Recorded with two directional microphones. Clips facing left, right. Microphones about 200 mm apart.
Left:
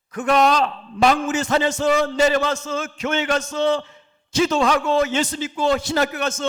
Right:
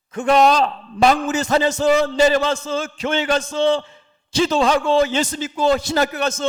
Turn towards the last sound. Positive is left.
turn(degrees=-35)  # may be behind; listen again after turning